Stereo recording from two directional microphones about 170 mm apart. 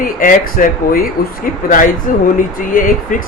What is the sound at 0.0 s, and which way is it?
A man's voice, 55° left (ahead or behind).